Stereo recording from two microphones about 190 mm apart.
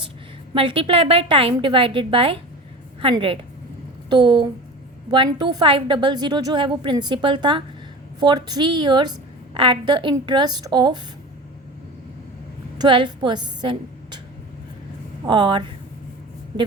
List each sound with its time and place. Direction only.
0.5 s a woman's voice: 30° right (ahead or behind)
12.8 s a woman's voice: 25° right (ahead or behind)
15.3 s a woman's voice: 25° right (ahead or behind)